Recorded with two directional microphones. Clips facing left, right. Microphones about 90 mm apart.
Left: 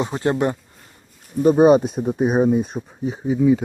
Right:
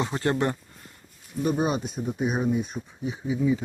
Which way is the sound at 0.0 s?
20° left (ahead or behind).